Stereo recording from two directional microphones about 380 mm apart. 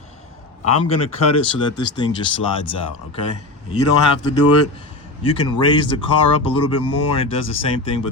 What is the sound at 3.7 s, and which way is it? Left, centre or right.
Speech, left.